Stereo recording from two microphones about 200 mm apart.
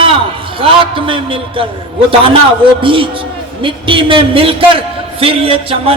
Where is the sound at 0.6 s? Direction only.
25° right (ahead or behind).